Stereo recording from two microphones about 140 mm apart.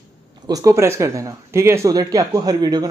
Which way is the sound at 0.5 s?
25° right (ahead or behind).